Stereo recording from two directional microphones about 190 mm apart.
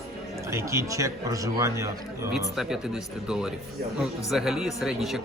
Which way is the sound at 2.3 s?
Centre (ahead or behind).